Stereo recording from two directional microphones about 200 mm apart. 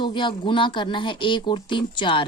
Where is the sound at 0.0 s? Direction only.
25° left (ahead or behind).